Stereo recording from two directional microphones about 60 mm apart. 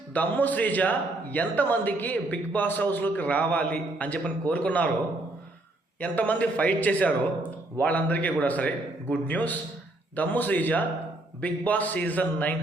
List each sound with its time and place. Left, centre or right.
0.1 s a man's voice: left
6.0 s a man's voice: left